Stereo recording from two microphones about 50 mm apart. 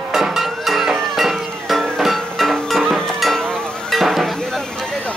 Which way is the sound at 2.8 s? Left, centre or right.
Centre.